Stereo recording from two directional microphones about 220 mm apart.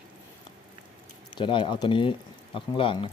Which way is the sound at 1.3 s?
20° left (ahead or behind).